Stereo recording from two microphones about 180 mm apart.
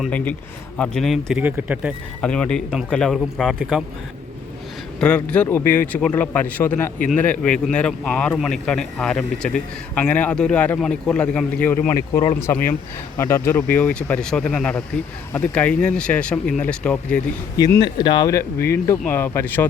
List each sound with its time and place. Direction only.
0.8 s speech: centre (ahead or behind)
2.2 s a man's voice: 5° left (ahead or behind)
4.9 s a man's voice: 5° left (ahead or behind)
11.9 s speech: 20° left (ahead or behind)
17.6 s speech: 20° left (ahead or behind)